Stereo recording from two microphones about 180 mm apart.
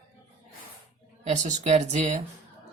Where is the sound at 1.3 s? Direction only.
40° right (ahead or behind).